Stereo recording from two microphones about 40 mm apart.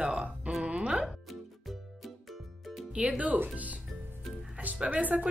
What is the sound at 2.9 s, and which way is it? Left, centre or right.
Speech, right.